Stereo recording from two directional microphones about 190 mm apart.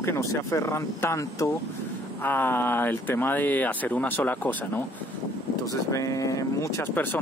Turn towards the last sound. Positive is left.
turn(degrees=15)  # may be behind; listen again after turning